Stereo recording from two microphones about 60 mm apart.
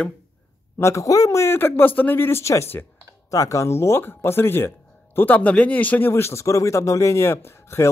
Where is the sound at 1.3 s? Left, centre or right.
Left.